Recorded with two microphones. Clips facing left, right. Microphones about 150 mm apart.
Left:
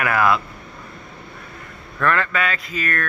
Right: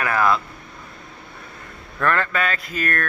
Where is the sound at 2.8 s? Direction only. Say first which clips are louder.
Right 1 dB; 50° right (ahead or behind).